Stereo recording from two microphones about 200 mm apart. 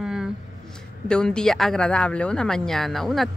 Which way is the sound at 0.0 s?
Centre (ahead or behind).